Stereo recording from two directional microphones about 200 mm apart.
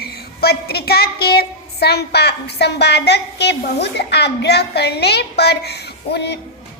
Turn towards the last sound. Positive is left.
turn(degrees=55)  # may be behind; listen again after turning